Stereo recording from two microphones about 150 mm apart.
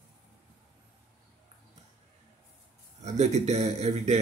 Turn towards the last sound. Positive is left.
turn(degrees=-45)  # may be behind; listen again after turning